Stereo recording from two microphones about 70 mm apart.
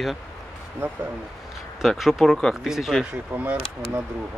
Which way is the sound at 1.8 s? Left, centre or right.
Centre.